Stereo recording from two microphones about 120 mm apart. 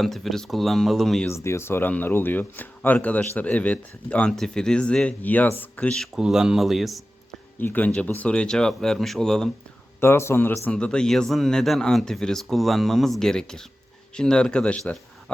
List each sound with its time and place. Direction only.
0.0 s speech: centre (ahead or behind)
1.5 s speech: 20° left (ahead or behind); by 7.0 s centre (ahead or behind)
7.6 s speech: 15° left (ahead or behind)
10.0 s speech: 20° left (ahead or behind)
10.7 s speech: 10° left (ahead or behind)